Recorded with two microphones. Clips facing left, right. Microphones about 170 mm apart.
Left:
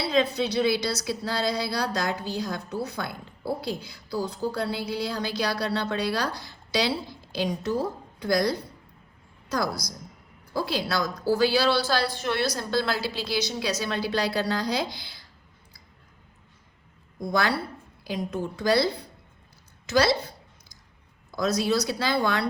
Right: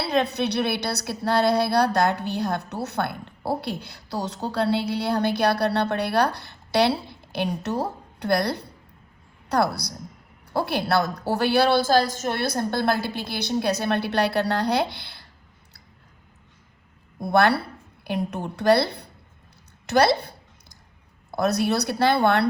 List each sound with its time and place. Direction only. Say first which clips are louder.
0.0 s a woman's voice: right 1 dB; 65° right (ahead or behind)
17.2 s a woman's voice: right 6 dB; 60° right (ahead or behind)
19.9 s a sound: right 3 dB; 60° right (ahead or behind)
21.2 s a woman's voice: right 2 dB; 60° right (ahead or behind)